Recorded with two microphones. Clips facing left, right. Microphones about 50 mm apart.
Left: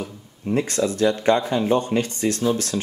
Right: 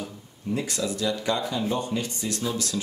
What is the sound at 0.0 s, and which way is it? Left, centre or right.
Speech, left.